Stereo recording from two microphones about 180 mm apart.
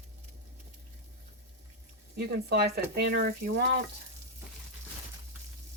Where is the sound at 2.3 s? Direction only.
65° right (ahead or behind).